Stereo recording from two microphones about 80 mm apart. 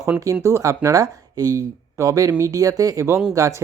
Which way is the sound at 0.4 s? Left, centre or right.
Right.